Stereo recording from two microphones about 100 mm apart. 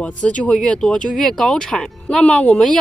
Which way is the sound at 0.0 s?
10° left (ahead or behind).